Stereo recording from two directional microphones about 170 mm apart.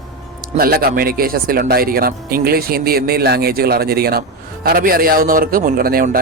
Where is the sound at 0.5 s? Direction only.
60° right (ahead or behind).